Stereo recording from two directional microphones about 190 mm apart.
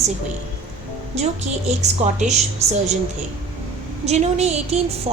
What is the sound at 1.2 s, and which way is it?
A woman's voice, 35° right (ahead or behind).